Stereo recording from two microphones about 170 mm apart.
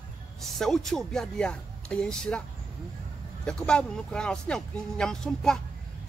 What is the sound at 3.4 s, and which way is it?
Speech, 5° left (ahead or behind).